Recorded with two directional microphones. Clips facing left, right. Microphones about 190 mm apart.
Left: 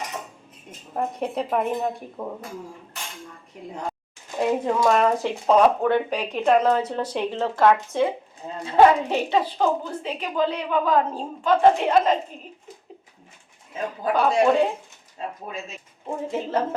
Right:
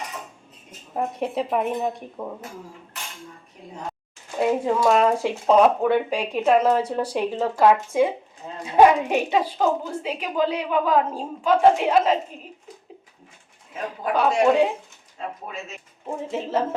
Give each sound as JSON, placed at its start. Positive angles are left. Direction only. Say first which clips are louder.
{"t": 0.9, "sound": "a woman's voice", "louder": "right 1 dB", "side_deg": -5}
{"t": 3.6, "sound": "a woman's voice", "louder": "left 7 dB", "side_deg": 75}
{"t": 4.4, "sound": "speech", "louder": "right 1 dB", "side_deg": -5}
{"t": 14.2, "sound": "a woman's voice", "louder": "right 1 dB", "side_deg": -5}
{"t": 16.0, "sound": "a woman's voice", "louder": "left 1 dB", "side_deg": 0}